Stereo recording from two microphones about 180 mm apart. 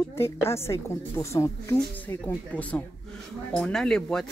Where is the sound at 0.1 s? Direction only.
15° left (ahead or behind).